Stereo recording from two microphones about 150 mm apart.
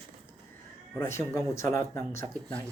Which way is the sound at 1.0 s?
20° left (ahead or behind).